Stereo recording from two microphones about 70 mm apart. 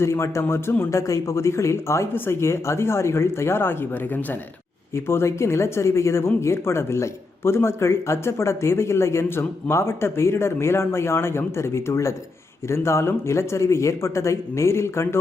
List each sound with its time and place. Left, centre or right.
0.0 s speech: left
0.9 s speech: left